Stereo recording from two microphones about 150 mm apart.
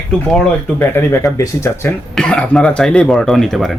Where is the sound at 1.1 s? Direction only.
20° left (ahead or behind).